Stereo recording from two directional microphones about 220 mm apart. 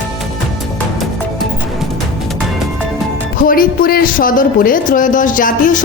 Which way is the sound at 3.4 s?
40° left (ahead or behind).